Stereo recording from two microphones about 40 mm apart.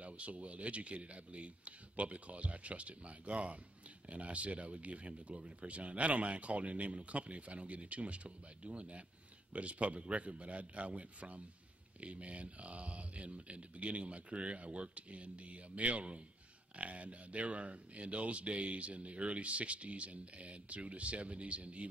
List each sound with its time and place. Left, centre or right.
0.0 s speech: right